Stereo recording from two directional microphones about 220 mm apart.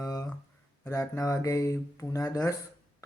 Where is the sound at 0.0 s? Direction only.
15° left (ahead or behind).